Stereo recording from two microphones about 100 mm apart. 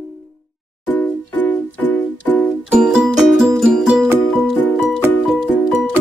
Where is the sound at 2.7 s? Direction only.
5° right (ahead or behind).